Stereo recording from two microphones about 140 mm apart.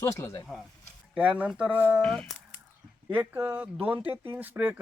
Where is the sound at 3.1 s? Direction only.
15° right (ahead or behind).